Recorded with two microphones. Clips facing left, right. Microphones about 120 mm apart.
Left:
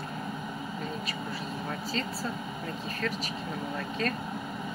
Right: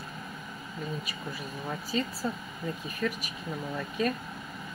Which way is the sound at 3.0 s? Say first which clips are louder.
Right 2 dB; 15° right (ahead or behind).